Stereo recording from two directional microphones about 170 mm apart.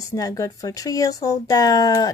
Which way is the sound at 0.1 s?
20° left (ahead or behind).